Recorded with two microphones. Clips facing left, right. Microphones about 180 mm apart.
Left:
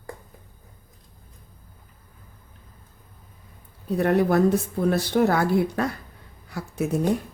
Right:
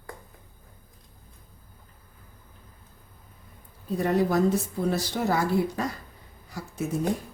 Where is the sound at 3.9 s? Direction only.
65° left (ahead or behind).